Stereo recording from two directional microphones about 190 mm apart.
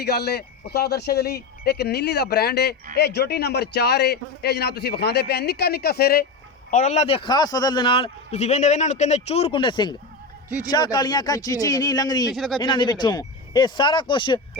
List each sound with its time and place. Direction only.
0.0 s a man's voice: 60° left (ahead or behind)
6.7 s a man's voice: 40° left (ahead or behind); by 12.3 s 20° left (ahead or behind)
12.3 s speech: centre (ahead or behind)
12.5 s speech: 25° left (ahead or behind)